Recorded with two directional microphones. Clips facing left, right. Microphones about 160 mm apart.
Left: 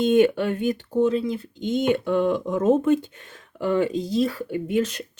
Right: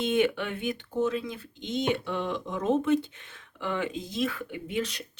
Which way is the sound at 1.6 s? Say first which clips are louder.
Left 7 dB; 50° left (ahead or behind).